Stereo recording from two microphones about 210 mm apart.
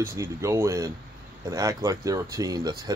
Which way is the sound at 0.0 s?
10° right (ahead or behind).